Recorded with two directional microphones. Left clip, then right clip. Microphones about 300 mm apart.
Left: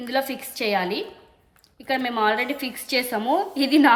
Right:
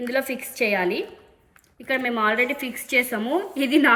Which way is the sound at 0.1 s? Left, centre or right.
Left.